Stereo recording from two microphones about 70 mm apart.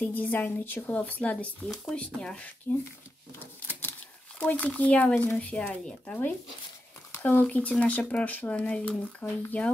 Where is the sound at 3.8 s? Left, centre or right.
Left.